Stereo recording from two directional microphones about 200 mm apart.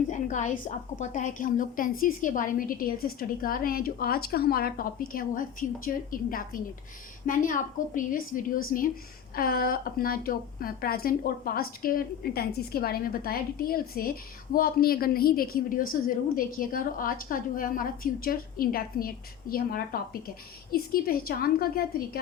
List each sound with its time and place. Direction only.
0.1 s a woman's voice: 40° left (ahead or behind)